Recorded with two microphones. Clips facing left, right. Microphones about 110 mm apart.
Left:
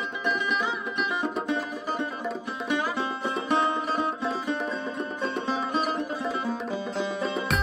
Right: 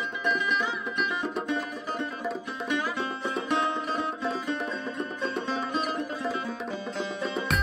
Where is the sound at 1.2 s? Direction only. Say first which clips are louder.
Left 2 dB; centre (ahead or behind).